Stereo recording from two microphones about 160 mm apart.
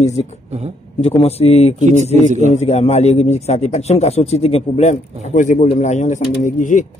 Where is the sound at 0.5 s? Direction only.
45° right (ahead or behind).